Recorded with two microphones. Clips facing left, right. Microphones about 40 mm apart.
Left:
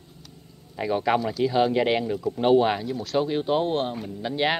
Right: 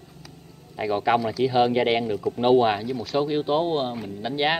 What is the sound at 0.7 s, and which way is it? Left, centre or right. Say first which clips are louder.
A man's voice: right 1 dB; centre.